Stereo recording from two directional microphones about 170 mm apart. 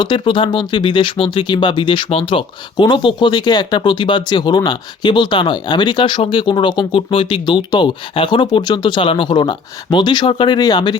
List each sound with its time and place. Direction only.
0.0 s speech: 30° left (ahead or behind)